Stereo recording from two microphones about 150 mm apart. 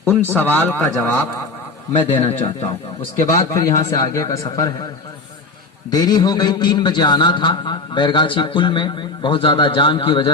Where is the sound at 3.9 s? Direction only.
20° left (ahead or behind).